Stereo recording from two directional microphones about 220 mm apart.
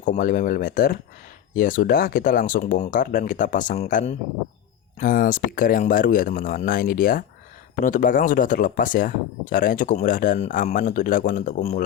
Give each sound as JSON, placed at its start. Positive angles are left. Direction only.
{"t": 0.0, "sound": "speech", "side_deg": 35}